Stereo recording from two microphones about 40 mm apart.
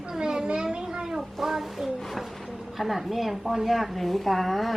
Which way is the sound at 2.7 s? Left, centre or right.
Centre.